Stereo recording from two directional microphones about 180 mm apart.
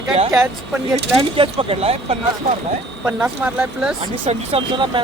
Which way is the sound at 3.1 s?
5° right (ahead or behind).